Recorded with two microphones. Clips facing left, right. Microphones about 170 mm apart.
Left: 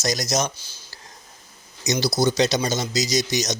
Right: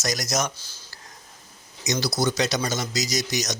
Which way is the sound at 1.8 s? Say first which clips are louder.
Left 3 dB; 35° left (ahead or behind).